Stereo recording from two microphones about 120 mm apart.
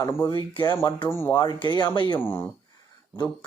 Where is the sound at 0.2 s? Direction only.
45° left (ahead or behind).